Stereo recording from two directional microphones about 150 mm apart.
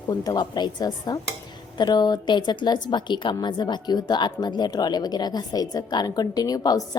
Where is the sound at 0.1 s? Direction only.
25° left (ahead or behind).